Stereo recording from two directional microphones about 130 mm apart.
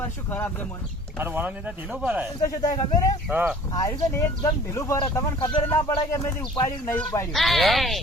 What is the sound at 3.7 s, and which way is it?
Speech, 25° left (ahead or behind).